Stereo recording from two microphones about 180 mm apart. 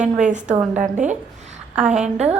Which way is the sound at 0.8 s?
40° right (ahead or behind).